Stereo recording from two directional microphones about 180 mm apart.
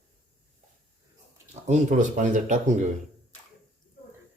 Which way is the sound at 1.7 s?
45° right (ahead or behind).